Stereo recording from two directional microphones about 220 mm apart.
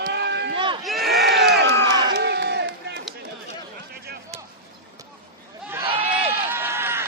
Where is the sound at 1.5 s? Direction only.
50° right (ahead or behind).